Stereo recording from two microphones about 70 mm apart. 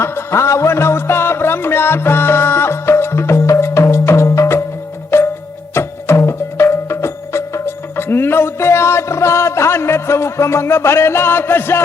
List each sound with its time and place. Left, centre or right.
0.0 s music: left